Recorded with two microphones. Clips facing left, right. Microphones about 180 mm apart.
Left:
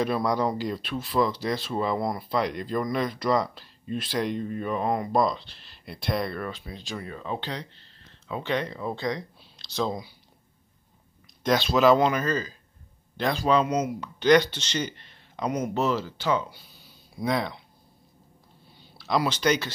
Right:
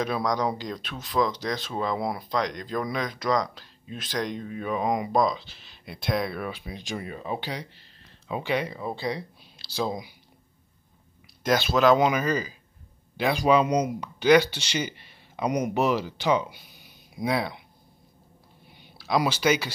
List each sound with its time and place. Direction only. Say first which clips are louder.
0.0 s speech: left 1 dB; 5° left (ahead or behind); by 5.1 s 10° right (ahead or behind)
5.1 s speech: even; centre (ahead or behind)
11.4 s speech: left 1 dB; centre (ahead or behind)
18.7 s a sound: right 1 dB; 15° right (ahead or behind)
19.1 s speech: right 1 dB; 10° right (ahead or behind)